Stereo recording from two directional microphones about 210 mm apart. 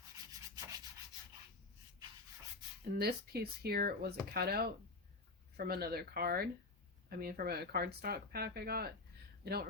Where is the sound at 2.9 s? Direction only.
50° right (ahead or behind).